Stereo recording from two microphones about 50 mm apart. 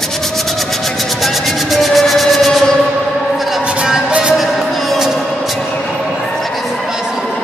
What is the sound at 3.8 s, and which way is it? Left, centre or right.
Music, centre.